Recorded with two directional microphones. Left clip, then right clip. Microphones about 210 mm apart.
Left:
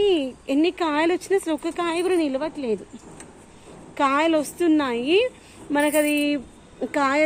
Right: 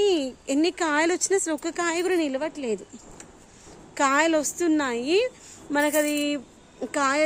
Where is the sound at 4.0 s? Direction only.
15° right (ahead or behind).